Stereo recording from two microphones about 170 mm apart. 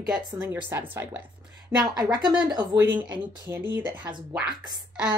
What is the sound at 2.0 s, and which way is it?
Speech, 25° right (ahead or behind).